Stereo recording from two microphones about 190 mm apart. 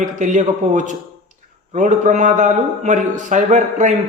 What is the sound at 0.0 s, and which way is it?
A man's voice, 40° right (ahead or behind).